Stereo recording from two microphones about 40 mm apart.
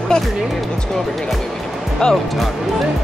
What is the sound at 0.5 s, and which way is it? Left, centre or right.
Speech, centre.